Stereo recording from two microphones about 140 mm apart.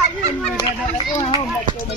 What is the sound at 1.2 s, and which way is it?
Speech, 40° left (ahead or behind).